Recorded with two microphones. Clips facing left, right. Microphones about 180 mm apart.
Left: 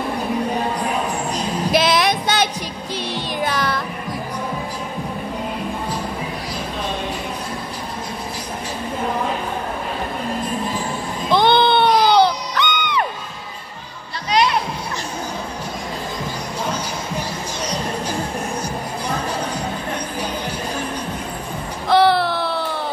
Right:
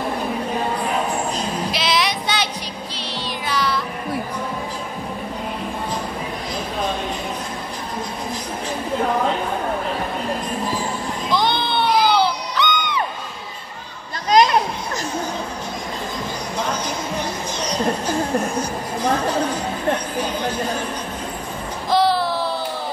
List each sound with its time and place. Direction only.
1.7 s female singing: 50° left (ahead or behind)
3.4 s music: 50° left (ahead or behind)
11.2 s a sound: 60° left (ahead or behind)
12.1 s music: 60° left (ahead or behind)
14.3 s music: 45° right (ahead or behind)
21.8 s music: 65° left (ahead or behind)